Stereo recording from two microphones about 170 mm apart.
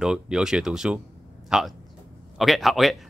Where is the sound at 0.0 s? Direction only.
5° right (ahead or behind).